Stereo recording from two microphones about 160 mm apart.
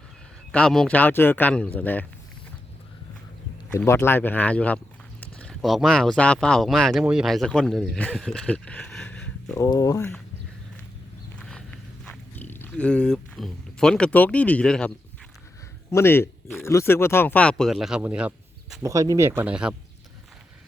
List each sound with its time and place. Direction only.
0.5 s speech: 5° left (ahead or behind)
3.7 s speech: 15° left (ahead or behind)
9.6 s speech: 20° left (ahead or behind)
11.3 s walk: 5° left (ahead or behind)
15.9 s speech: 15° left (ahead or behind); by 18.8 s 10° right (ahead or behind)
18.8 s speech: 20° right (ahead or behind)